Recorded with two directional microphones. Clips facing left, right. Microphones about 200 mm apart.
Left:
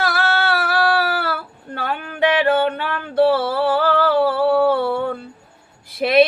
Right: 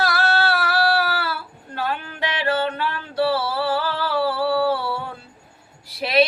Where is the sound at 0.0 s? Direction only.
55° left (ahead or behind).